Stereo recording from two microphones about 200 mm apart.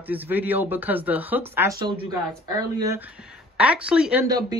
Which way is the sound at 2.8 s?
10° right (ahead or behind).